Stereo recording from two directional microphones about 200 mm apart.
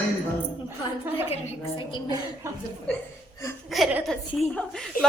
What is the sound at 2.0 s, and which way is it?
Speech, 15° right (ahead or behind).